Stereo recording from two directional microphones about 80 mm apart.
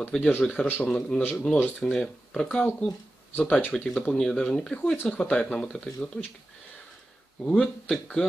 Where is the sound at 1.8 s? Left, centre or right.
Centre.